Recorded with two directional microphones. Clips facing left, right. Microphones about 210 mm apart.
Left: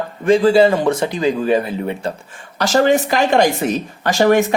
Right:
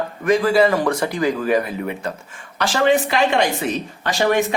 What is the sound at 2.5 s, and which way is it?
A woman's voice, 40° left (ahead or behind).